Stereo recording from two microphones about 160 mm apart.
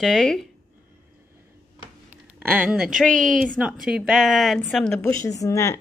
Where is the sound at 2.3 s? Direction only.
10° right (ahead or behind).